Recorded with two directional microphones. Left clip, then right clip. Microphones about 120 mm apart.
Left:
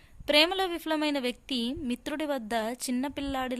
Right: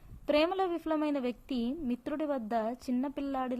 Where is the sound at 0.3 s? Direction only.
15° left (ahead or behind).